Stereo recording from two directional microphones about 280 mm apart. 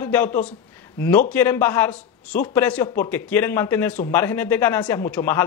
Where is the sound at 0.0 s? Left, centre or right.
Centre.